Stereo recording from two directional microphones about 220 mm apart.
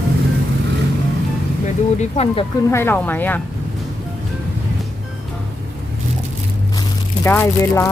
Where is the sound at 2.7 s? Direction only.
10° left (ahead or behind).